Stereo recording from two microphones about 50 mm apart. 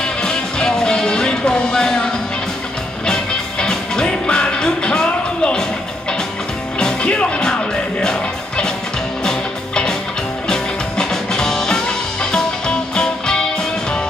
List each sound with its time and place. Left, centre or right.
0.2 s music: centre
3.1 s music: centre
6.8 s music: centre